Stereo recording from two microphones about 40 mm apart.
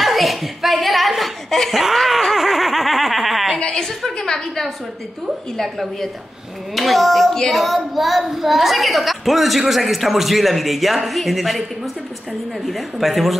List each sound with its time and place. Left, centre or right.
0.0 s a woman's voice: centre
1.7 s snicker: centre
3.5 s a woman's voice: left
4.2 s a woman's voice: centre
12.6 s a woman's voice: centre